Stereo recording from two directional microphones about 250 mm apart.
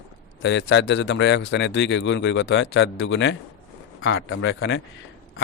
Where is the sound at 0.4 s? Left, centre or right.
Left.